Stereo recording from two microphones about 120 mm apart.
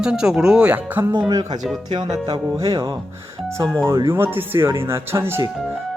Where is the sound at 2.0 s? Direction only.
60° right (ahead or behind).